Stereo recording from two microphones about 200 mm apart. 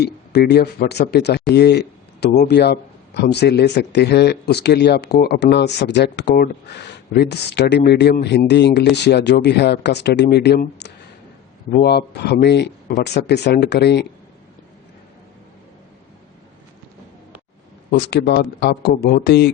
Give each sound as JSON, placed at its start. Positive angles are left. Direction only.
{"t": 0.0, "sound": "speech", "side_deg": 55}
{"t": 18.1, "sound": "speech", "side_deg": 55}